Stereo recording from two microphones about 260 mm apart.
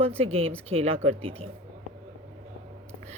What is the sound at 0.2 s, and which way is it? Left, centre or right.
A woman's voice, right.